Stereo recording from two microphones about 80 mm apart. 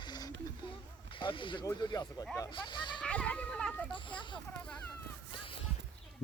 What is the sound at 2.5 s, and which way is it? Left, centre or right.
Speech, left.